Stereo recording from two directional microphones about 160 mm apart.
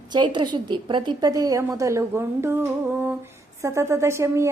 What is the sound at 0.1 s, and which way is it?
A woman's voice, 30° right (ahead or behind).